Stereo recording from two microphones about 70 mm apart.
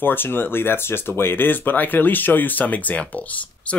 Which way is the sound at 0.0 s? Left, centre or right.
Left.